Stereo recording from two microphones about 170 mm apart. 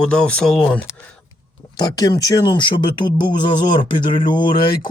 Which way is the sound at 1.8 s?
25° left (ahead or behind).